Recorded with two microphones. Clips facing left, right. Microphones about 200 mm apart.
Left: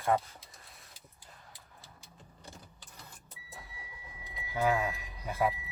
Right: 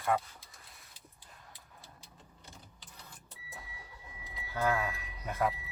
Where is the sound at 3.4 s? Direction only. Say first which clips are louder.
Even; centre (ahead or behind).